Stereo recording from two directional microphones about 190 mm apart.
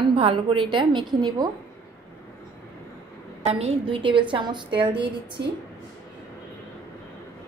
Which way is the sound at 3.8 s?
25° right (ahead or behind).